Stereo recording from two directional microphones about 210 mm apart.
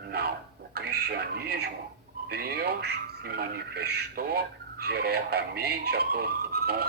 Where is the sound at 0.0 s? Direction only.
50° right (ahead or behind).